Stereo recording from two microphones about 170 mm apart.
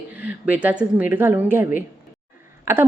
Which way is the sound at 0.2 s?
10° right (ahead or behind).